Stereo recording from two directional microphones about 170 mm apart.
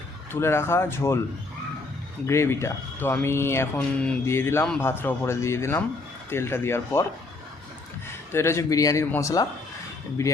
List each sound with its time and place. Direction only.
0.3 s speech: 15° left (ahead or behind)
2.2 s speech: 15° left (ahead or behind)
8.3 s speech: 15° left (ahead or behind)